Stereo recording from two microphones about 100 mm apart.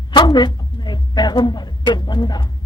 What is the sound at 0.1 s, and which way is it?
A woman's voice, 45° left (ahead or behind).